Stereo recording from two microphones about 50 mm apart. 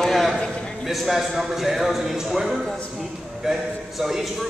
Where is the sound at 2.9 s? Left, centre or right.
Centre.